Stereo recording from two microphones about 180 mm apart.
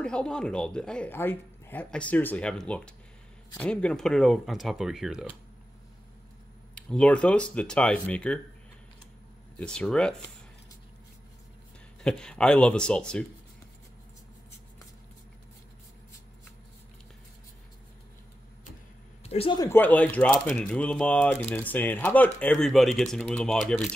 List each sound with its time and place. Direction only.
0.0 s speech: 5° left (ahead or behind)
6.7 s speech: 5° left (ahead or behind)
9.6 s speech: 5° left (ahead or behind)
12.0 s speech: 5° left (ahead or behind)
19.2 s speech: 30° left (ahead or behind)
19.6 s speech: 10° left (ahead or behind)